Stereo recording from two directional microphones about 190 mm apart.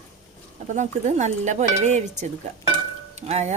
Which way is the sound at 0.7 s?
40° right (ahead or behind).